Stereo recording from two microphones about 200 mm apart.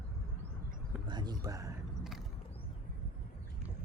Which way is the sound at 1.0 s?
20° right (ahead or behind).